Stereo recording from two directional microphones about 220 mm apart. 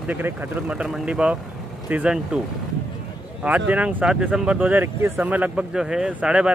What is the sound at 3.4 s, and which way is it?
Speech, 5° right (ahead or behind).